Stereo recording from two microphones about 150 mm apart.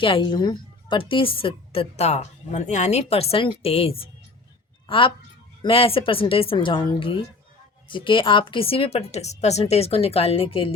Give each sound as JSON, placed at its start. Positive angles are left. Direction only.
{"t": 0.0, "sound": "a woman's voice", "side_deg": 35}